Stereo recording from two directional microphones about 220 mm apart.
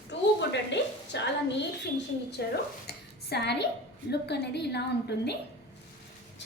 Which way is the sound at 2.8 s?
50° left (ahead or behind).